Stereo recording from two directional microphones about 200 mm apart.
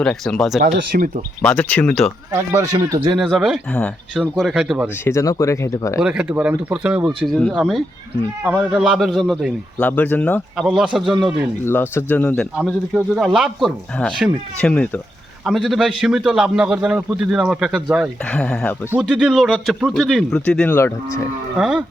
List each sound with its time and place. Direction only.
0.0 s a man's voice: 5° left (ahead or behind)
0.9 s speech: 40° right (ahead or behind)
1.4 s speech: 5° left (ahead or behind)
2.5 s speech: 15° right (ahead or behind)
3.2 s a man's voice: centre (ahead or behind)
5.0 s speech: 15° left (ahead or behind)
6.0 s a man's voice: 5° right (ahead or behind)
11.6 s a man's voice: 10° left (ahead or behind)
18.9 s a man's voice: 5° right (ahead or behind); by 21.2 s 10° left (ahead or behind)
21.6 s a man's voice: 5° right (ahead or behind)